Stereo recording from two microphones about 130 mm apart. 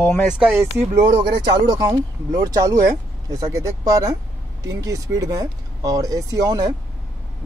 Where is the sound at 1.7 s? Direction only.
30° right (ahead or behind).